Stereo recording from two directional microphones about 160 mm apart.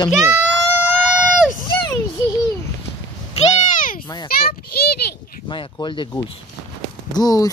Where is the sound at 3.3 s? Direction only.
55° left (ahead or behind).